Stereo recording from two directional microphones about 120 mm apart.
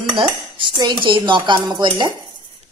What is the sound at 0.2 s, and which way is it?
Dishes, 45° right (ahead or behind).